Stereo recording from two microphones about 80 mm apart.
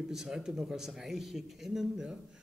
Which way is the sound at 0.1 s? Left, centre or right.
Centre.